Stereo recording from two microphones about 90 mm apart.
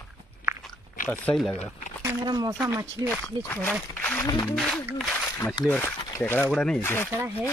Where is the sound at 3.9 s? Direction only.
20° left (ahead or behind).